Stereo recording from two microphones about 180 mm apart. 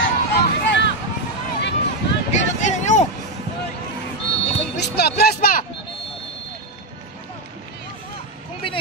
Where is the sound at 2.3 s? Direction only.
40° left (ahead or behind).